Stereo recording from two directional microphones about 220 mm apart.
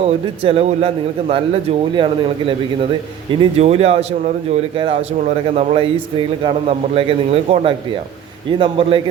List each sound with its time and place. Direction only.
0.0 s a man's voice: 25° right (ahead or behind)